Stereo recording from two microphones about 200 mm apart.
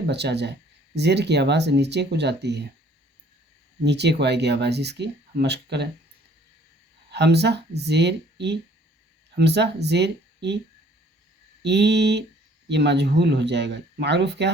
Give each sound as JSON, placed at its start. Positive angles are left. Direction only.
{"t": 0.1, "sound": "speech", "side_deg": -60}
{"t": 3.8, "sound": "speech", "side_deg": -60}
{"t": 7.1, "sound": "speech", "side_deg": -55}
{"t": 11.6, "sound": "speech", "side_deg": -60}